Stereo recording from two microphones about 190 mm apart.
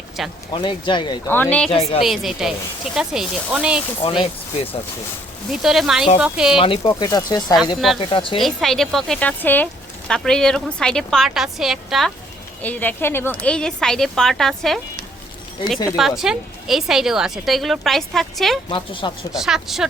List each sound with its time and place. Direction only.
0.2 s speech: centre (ahead or behind)
0.5 s speech: 25° left (ahead or behind)
1.3 s a woman's voice: 10° left (ahead or behind)
1.7 s a woman's voice: 30° left (ahead or behind)
2.0 s speech: centre (ahead or behind)
4.0 s speech: 30° left (ahead or behind)
5.5 s speech: centre (ahead or behind)
6.6 s speech: 25° left (ahead or behind)
8.4 s speech: centre (ahead or behind)
18.7 s speech: 25° left (ahead or behind)
19.3 s speech: centre (ahead or behind)